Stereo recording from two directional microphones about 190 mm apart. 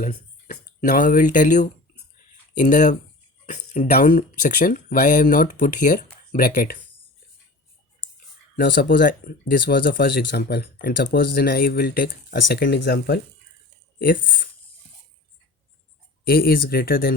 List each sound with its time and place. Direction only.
0.0 s speech: 45° left (ahead or behind)
3.4 s a sound: 40° left (ahead or behind)
3.9 s speech: 45° left (ahead or behind)
8.5 s speech: 55° left (ahead or behind)
14.0 s speech: 45° left (ahead or behind)
16.2 s speech: 50° left (ahead or behind)